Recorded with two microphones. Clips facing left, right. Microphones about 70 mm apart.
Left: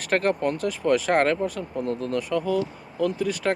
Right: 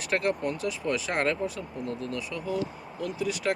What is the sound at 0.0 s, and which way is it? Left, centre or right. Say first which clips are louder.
Speech: left 5 dB; left.